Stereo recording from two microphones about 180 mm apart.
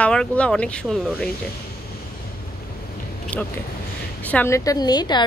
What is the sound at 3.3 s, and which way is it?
A woman's voice, 10° left (ahead or behind).